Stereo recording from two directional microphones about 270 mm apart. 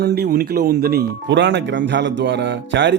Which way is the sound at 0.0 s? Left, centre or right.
Right.